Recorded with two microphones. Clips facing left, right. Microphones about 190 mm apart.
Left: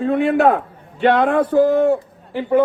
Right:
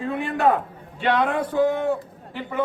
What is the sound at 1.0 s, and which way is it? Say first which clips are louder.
Music: left 7 dB; 55° left (ahead or behind).